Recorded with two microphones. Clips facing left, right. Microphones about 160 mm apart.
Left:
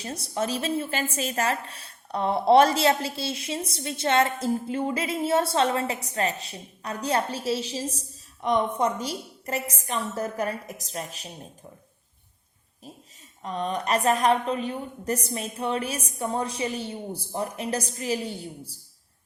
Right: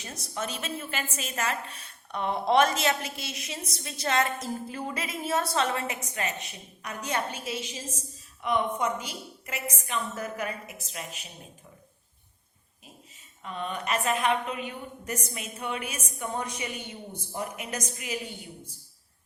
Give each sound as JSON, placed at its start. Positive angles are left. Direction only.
{"t": 0.0, "sound": "a woman's voice", "side_deg": 30}
{"t": 13.4, "sound": "a woman's voice", "side_deg": 35}